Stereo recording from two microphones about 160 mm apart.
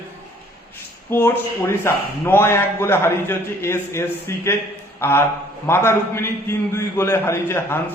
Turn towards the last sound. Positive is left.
turn(degrees=15)  # may be behind; listen again after turning